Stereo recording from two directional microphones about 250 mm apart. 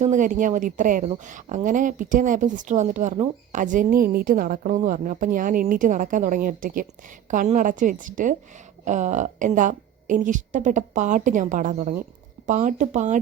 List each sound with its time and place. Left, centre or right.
0.0 s a woman's voice: right